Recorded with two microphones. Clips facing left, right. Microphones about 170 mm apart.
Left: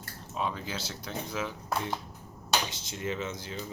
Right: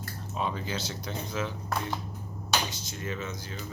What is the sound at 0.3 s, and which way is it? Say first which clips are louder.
Speech: right 1 dB; centre (ahead or behind).